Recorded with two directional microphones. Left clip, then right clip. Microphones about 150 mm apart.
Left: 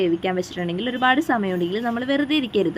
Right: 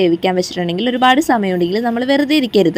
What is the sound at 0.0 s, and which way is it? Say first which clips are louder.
Speech: right 7 dB; 35° right (ahead or behind).